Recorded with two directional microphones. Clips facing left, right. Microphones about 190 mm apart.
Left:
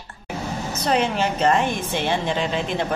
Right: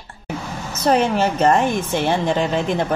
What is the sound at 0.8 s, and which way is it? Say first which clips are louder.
A woman's voice: right 5 dB; 45° right (ahead or behind).